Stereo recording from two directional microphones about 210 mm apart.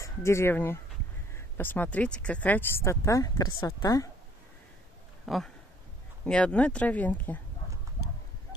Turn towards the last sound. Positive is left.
turn(degrees=10)  # may be behind; listen again after turning